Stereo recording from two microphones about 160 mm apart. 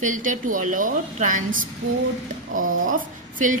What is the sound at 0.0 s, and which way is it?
A woman's voice, 55° right (ahead or behind).